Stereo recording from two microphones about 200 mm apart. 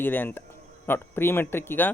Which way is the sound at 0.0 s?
10° left (ahead or behind).